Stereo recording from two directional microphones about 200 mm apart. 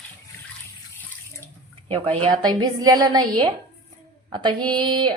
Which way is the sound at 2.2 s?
20° right (ahead or behind).